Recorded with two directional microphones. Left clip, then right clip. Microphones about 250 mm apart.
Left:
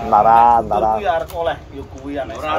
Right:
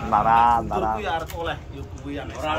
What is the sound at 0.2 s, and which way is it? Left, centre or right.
Speech, centre.